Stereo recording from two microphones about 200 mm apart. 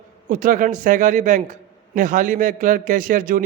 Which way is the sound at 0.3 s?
40° right (ahead or behind).